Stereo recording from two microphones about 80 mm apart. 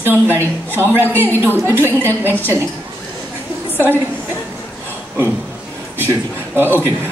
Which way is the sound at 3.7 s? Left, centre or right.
Right.